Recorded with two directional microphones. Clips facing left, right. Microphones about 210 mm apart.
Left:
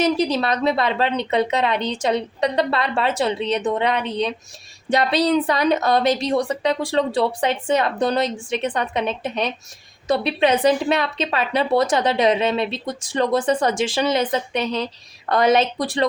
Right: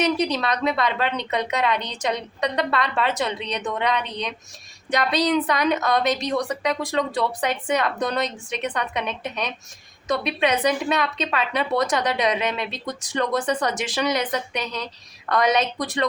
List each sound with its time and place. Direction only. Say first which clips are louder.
0.0 s a woman's voice: left 3 dB; 30° left (ahead or behind)